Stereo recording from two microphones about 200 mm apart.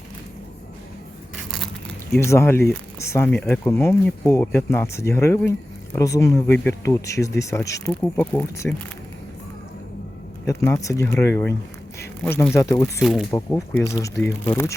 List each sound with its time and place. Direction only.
2.1 s speech: 15° left (ahead or behind)
10.4 s speech: 15° left (ahead or behind)
13.0 s speech: centre (ahead or behind)
13.3 s speech: 15° left (ahead or behind)